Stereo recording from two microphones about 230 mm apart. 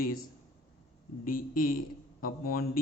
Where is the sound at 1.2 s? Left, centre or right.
Left.